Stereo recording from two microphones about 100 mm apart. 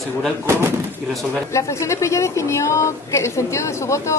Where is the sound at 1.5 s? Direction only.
30° left (ahead or behind).